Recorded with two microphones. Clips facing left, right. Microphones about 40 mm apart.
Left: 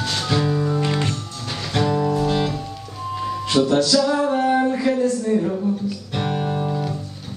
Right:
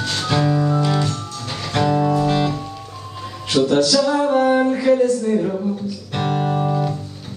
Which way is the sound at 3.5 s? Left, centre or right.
Left.